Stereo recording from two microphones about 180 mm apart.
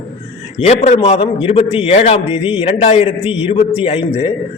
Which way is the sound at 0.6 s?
40° left (ahead or behind).